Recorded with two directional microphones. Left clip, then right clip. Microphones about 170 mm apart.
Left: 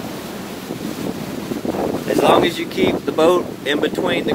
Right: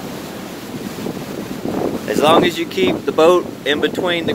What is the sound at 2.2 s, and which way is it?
Speech, 30° right (ahead or behind).